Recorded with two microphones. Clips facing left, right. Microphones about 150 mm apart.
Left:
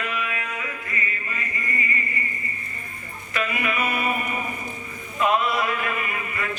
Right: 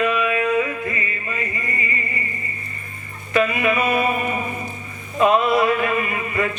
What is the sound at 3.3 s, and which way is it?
Mantra, 25° right (ahead or behind).